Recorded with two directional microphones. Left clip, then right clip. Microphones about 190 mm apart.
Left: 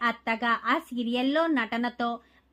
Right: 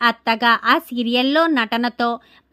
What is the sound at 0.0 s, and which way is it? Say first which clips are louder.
Speech: right 10 dB; 40° right (ahead or behind).